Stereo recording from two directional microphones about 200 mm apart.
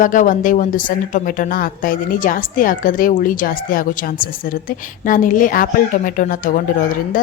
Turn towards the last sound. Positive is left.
turn(degrees=40)  # may be behind; listen again after turning